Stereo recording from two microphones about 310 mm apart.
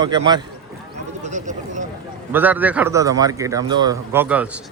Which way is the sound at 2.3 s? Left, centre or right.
Centre.